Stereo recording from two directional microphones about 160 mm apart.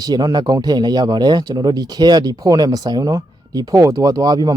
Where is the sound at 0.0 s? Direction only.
25° right (ahead or behind).